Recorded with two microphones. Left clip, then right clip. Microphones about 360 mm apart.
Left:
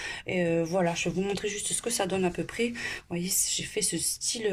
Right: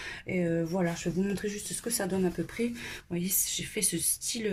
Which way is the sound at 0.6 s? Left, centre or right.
Left.